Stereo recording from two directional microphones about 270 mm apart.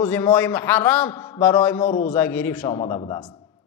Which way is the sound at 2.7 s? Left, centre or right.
Left.